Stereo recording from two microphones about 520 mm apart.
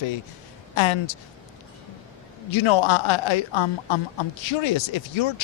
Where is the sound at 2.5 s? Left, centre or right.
Left.